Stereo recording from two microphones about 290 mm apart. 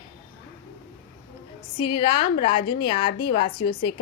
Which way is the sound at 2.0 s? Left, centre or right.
Centre.